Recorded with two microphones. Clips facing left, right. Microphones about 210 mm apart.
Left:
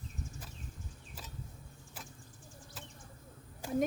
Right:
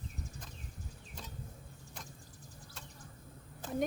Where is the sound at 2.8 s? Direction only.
5° left (ahead or behind).